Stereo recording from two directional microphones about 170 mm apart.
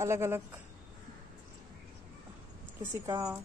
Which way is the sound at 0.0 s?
15° right (ahead or behind).